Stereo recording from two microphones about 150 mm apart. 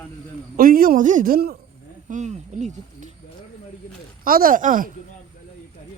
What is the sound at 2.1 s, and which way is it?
Speech, 55° right (ahead or behind).